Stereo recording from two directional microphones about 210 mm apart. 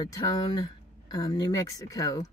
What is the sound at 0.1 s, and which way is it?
Speech, 15° left (ahead or behind).